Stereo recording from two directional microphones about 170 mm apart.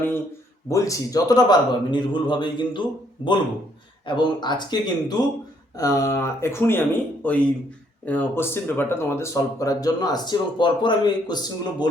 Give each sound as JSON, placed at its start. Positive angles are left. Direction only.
{"t": 0.7, "sound": "a man's voice", "side_deg": 20}
{"t": 4.0, "sound": "a man's voice", "side_deg": 25}